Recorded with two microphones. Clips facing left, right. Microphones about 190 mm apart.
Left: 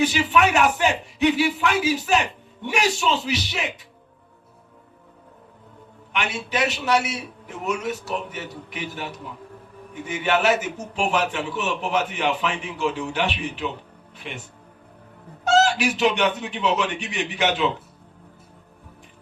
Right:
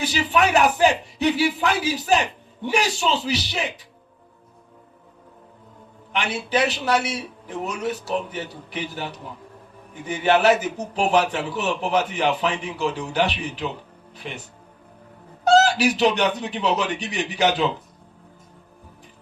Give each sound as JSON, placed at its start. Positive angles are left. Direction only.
{"t": 0.0, "sound": "a man's voice", "side_deg": -35}
{"t": 6.1, "sound": "a man's voice", "side_deg": -35}
{"t": 15.4, "sound": "a man's voice", "side_deg": -35}